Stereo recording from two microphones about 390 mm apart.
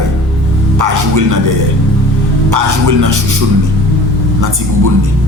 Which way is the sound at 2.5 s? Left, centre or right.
Right.